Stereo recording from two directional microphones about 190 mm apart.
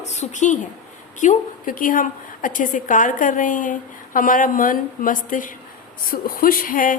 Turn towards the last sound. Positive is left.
turn(degrees=45)  # may be behind; listen again after turning